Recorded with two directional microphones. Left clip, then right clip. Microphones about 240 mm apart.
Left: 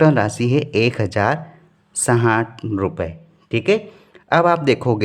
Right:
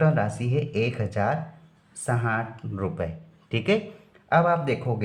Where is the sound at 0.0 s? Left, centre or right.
Left.